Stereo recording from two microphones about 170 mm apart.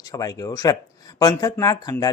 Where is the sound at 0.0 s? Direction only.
20° left (ahead or behind).